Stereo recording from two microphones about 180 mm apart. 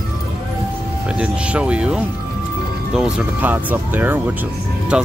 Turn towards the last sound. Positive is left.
turn(degrees=-5)  # may be behind; listen again after turning